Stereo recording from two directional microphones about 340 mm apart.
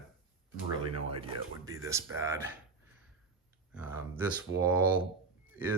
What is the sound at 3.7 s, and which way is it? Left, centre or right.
Speech, centre.